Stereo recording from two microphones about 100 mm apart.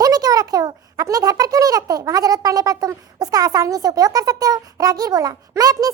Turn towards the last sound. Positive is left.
turn(degrees=-40)  # may be behind; listen again after turning